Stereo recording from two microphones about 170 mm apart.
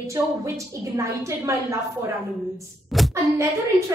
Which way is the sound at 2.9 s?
Centre (ahead or behind).